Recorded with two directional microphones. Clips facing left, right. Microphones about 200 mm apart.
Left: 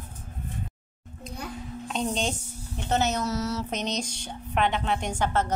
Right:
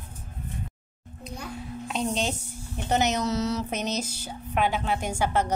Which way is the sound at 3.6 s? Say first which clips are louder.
Right 1 dB; 5° right (ahead or behind).